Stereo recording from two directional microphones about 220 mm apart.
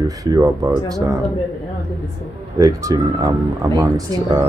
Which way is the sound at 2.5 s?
15° right (ahead or behind).